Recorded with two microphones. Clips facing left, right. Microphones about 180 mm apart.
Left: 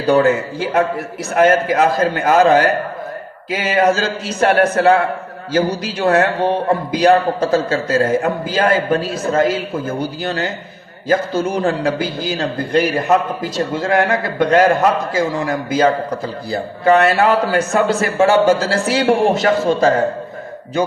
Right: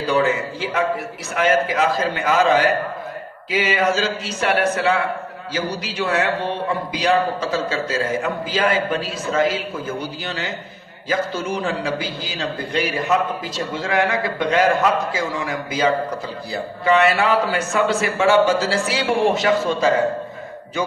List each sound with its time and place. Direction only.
0.0 s a man's voice: 45° left (ahead or behind)